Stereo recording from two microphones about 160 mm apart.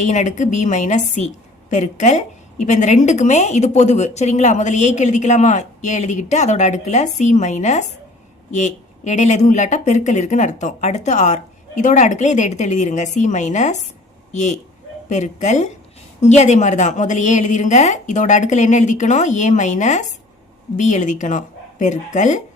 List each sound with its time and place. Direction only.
0.0 s a woman's voice: 50° left (ahead or behind)